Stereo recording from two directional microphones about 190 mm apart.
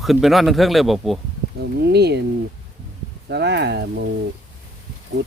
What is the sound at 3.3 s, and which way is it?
Speech, 60° right (ahead or behind).